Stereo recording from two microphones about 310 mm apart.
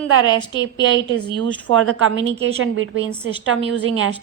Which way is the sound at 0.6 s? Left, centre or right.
Right.